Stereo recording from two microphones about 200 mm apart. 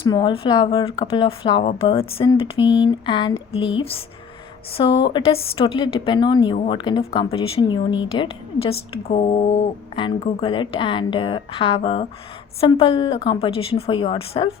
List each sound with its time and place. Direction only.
0.0 s a woman's voice: 20° left (ahead or behind)